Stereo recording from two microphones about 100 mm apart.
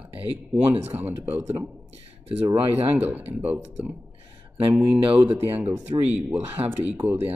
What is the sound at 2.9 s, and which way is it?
Speech, 15° right (ahead or behind).